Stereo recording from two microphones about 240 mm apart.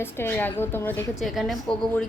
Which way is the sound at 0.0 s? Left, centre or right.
Centre.